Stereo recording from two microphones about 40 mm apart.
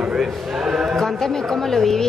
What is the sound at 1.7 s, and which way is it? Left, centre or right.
Speech, centre.